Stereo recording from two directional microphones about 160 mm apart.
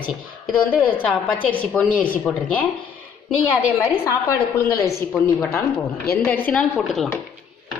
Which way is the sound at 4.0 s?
15° left (ahead or behind).